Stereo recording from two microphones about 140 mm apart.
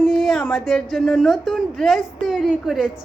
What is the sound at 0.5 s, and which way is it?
A woman's voice, centre (ahead or behind).